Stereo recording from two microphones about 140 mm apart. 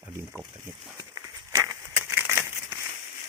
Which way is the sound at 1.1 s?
25° right (ahead or behind).